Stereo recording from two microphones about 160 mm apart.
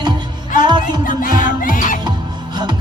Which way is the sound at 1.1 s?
55° left (ahead or behind).